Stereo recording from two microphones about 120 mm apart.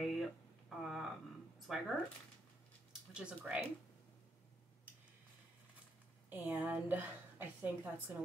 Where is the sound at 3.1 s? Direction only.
10° right (ahead or behind).